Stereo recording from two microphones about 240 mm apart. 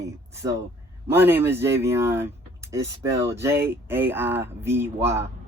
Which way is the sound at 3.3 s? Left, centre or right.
Centre.